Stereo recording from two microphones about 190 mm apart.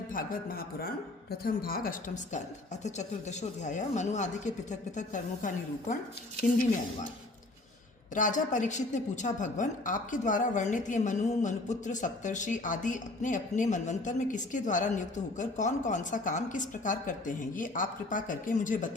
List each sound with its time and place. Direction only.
0.1 s a woman's voice: 50° left (ahead or behind)
8.1 s a woman's voice: 40° left (ahead or behind)